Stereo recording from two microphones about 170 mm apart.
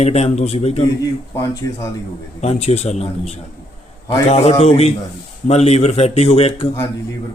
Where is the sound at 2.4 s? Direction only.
40° left (ahead or behind).